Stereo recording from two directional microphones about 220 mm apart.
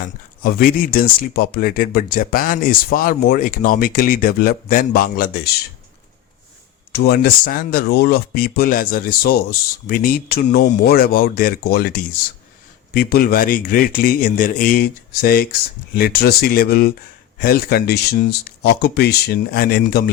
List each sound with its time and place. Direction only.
0.4 s speech: 40° left (ahead or behind)
6.9 s speech: 45° left (ahead or behind)